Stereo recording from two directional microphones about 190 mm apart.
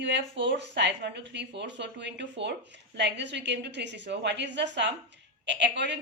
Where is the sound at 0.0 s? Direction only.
65° right (ahead or behind).